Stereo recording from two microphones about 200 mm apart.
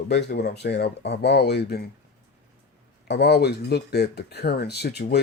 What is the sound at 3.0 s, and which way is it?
Speech, 55° left (ahead or behind).